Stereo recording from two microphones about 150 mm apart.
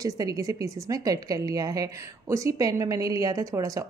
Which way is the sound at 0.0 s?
25° right (ahead or behind).